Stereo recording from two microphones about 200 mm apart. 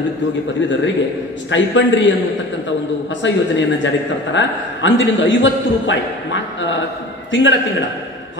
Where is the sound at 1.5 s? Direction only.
65° left (ahead or behind).